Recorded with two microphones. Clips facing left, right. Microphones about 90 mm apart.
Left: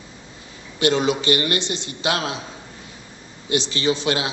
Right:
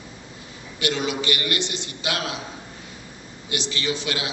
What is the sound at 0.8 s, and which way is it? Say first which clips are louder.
A man's voice: left 6 dB; 30° left (ahead or behind).